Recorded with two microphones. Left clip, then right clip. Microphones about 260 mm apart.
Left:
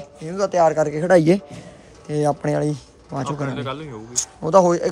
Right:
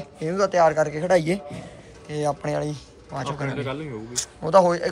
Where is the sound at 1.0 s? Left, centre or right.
Left.